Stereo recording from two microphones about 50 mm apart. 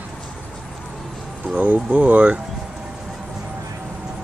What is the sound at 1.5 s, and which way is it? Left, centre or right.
Speech, right.